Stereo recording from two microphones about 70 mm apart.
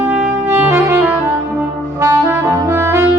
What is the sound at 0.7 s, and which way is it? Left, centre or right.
Saxophone, right.